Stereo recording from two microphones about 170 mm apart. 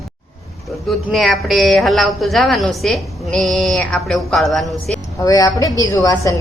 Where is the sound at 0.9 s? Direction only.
Centre (ahead or behind).